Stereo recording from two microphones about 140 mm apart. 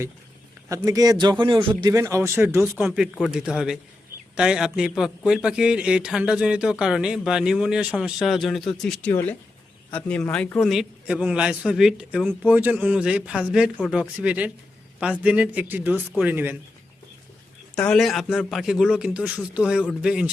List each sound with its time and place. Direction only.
0.7 s a man's voice: 25° right (ahead or behind); by 10.7 s 10° left (ahead or behind)
10.7 s a man's voice: 5° right (ahead or behind)
17.7 s a man's voice: 5° left (ahead or behind)